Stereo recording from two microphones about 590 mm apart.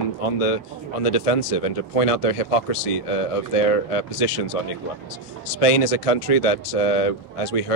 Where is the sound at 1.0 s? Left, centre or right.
Left.